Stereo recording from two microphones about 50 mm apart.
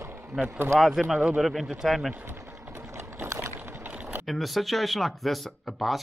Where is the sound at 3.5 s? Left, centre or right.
Right.